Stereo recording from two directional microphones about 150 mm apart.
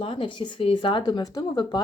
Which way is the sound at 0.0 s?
35° left (ahead or behind).